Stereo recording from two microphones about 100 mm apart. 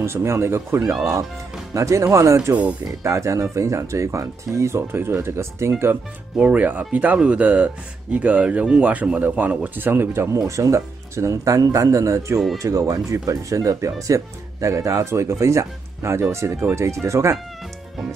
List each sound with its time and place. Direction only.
0.0 s speech: 25° right (ahead or behind)
6.3 s speech: 15° right (ahead or behind); by 17.4 s 30° right (ahead or behind)